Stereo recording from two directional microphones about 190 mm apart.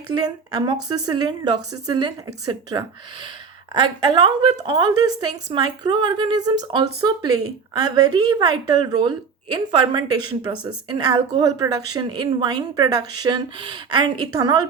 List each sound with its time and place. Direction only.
0.1 s a woman's voice: 20° right (ahead or behind)